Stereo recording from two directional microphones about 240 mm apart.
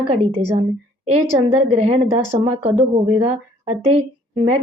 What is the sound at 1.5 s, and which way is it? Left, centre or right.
Speech, right.